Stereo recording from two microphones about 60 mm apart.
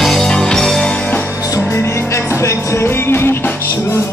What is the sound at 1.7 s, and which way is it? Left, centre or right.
Music, left.